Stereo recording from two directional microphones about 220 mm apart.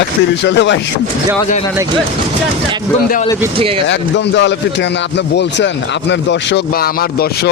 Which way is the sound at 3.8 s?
55° left (ahead or behind).